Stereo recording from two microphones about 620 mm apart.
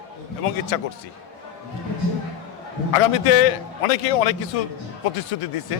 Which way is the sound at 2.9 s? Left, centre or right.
Left.